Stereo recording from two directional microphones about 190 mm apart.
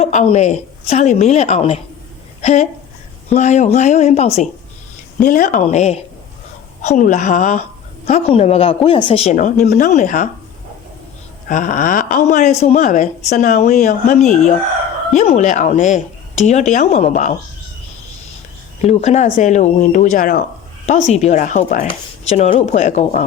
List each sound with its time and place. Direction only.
0.0 s a woman's voice: 35° left (ahead or behind)
11.4 s speech: 45° left (ahead or behind)
18.8 s speech: 35° left (ahead or behind)